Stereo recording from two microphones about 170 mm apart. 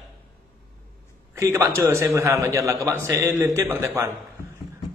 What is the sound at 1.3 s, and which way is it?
A man's voice, 15° right (ahead or behind).